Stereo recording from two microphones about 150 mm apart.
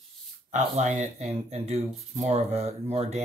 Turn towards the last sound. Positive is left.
turn(degrees=-45)  # may be behind; listen again after turning